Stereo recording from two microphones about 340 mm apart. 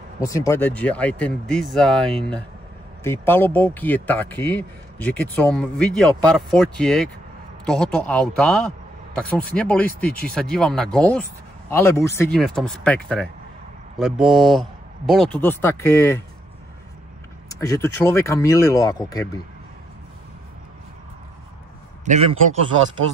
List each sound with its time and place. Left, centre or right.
0.2 s speech: centre
17.5 s speech: centre
22.1 s a man's voice: right